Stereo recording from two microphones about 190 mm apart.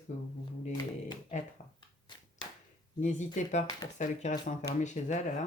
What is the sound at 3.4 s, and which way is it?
Speech, 40° left (ahead or behind).